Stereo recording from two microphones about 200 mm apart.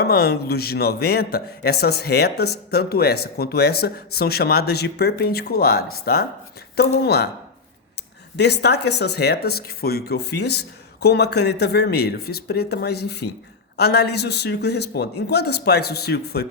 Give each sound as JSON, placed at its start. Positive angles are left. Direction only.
{"t": 0.0, "sound": "speech", "side_deg": 50}
{"t": 8.4, "sound": "speech", "side_deg": 55}